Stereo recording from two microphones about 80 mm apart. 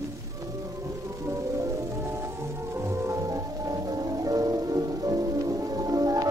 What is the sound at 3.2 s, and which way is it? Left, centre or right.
Music, right.